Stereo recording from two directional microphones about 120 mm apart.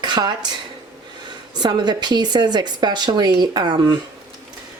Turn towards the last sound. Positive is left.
turn(degrees=-35)  # may be behind; listen again after turning